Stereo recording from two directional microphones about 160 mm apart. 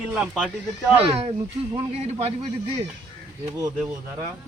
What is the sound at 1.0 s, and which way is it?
A man's voice, 40° right (ahead or behind).